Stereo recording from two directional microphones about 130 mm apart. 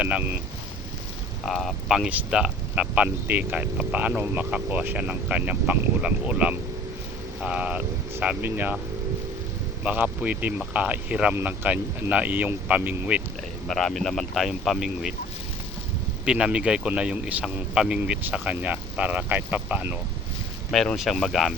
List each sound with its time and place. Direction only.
0.0 s speech: 10° right (ahead or behind)
1.5 s speech: centre (ahead or behind)
9.8 s speech: 10° right (ahead or behind)
13.7 s speech: centre (ahead or behind)
16.2 s speech: 5° right (ahead or behind)
20.7 s speech: 5° left (ahead or behind)